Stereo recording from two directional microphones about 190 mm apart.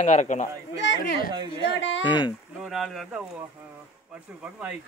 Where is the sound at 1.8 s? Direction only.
75° left (ahead or behind).